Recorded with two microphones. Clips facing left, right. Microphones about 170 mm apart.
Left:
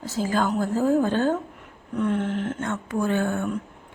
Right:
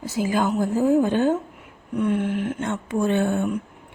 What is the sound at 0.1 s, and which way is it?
A woman's voice, 15° right (ahead or behind).